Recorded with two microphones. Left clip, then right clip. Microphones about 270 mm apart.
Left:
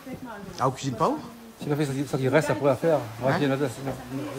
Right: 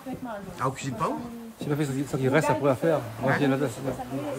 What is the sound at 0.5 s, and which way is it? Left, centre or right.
A man's voice, centre.